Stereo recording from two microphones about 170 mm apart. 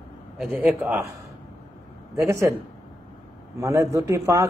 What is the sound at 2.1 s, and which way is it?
Speech, 15° right (ahead or behind).